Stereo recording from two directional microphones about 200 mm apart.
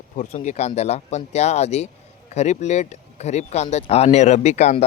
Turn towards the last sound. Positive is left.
turn(degrees=35)  # may be behind; listen again after turning